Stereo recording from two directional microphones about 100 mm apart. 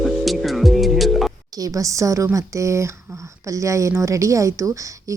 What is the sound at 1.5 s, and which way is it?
A woman's voice, 35° right (ahead or behind).